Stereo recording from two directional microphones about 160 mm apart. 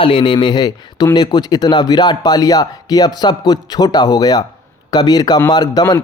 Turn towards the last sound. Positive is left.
turn(degrees=25)  # may be behind; listen again after turning